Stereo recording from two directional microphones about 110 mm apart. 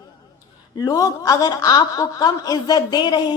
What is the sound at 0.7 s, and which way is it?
A woman's voice, 35° left (ahead or behind).